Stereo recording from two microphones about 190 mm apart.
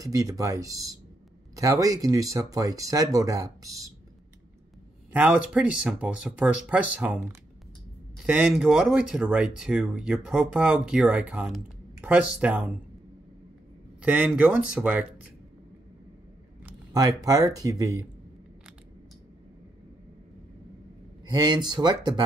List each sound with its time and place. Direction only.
0.0 s speech: 20° right (ahead or behind)
5.1 s speech: 5° right (ahead or behind)
8.3 s speech: 5° right (ahead or behind)
14.0 s speech: 5° right (ahead or behind)
17.2 s speech: 20° right (ahead or behind)
21.3 s speech: 20° right (ahead or behind)